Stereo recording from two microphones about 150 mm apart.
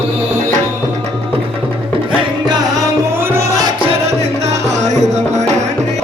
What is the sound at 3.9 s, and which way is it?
Music, 45° right (ahead or behind).